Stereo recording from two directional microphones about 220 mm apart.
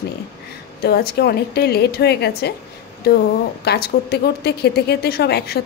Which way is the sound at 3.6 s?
45° left (ahead or behind).